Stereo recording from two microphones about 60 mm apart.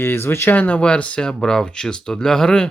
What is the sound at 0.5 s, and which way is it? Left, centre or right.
Speech, left.